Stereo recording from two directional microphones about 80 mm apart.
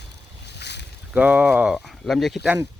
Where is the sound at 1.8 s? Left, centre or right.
Centre.